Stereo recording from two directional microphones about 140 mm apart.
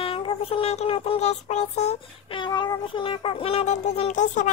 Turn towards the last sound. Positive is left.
turn(degrees=60)  # may be behind; listen again after turning